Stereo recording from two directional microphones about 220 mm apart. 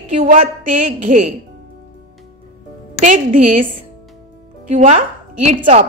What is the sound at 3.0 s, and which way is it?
Speech, 35° right (ahead or behind).